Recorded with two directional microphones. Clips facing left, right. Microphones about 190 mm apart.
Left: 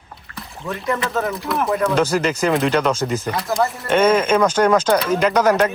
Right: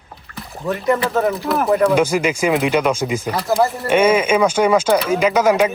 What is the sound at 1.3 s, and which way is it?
Speech, centre (ahead or behind).